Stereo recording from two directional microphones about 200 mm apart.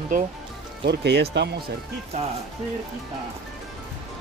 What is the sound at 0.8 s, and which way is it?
Speech, 55° right (ahead or behind).